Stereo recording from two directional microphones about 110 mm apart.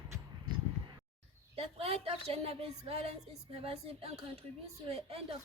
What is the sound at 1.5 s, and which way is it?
A woman's voice, 65° right (ahead or behind).